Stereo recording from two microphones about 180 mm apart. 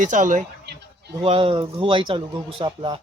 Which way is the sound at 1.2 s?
30° right (ahead or behind).